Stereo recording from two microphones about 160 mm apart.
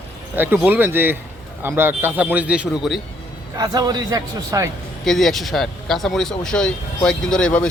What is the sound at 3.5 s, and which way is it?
A man's voice, 25° right (ahead or behind).